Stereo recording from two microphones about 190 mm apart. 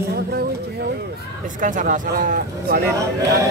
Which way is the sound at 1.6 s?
45° right (ahead or behind).